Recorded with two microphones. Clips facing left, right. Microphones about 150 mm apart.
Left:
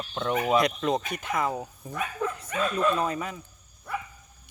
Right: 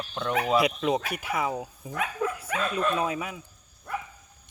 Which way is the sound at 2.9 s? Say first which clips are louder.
Even; 5° right (ahead or behind).